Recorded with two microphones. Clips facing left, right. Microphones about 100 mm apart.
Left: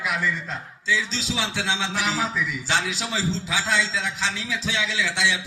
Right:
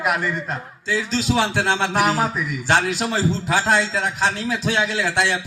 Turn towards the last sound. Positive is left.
turn(degrees=-50)  # may be behind; listen again after turning